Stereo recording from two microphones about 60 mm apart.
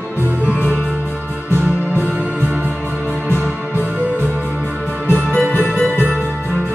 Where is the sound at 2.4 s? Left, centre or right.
Right.